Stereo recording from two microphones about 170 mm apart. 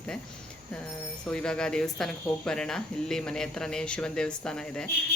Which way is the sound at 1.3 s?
5° left (ahead or behind).